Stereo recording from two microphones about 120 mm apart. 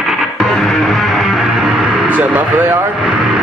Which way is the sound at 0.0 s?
5° right (ahead or behind).